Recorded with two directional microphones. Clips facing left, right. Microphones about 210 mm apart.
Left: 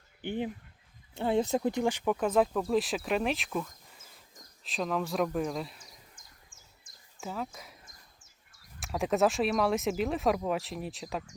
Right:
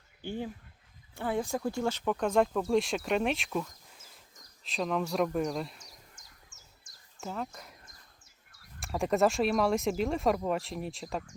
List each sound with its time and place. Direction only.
0.2 s speech: 20° left (ahead or behind); by 5.9 s centre (ahead or behind)
7.2 s speech: centre (ahead or behind)
7.9 s bird: 50° left (ahead or behind)
8.8 s speech: centre (ahead or behind)